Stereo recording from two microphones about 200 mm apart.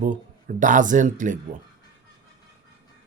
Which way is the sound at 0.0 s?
40° right (ahead or behind).